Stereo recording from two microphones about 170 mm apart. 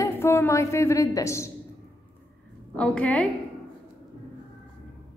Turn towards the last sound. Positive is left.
turn(degrees=5)  # may be behind; listen again after turning